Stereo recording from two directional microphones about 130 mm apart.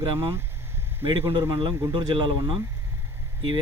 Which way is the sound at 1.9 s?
35° right (ahead or behind).